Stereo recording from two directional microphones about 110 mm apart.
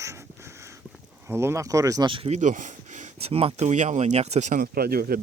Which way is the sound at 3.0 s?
65° right (ahead or behind).